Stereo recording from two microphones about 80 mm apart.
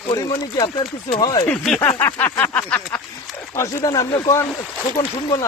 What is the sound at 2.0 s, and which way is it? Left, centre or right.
Speech, left.